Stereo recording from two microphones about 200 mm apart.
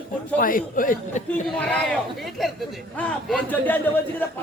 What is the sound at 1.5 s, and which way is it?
A man's voice, 5° left (ahead or behind).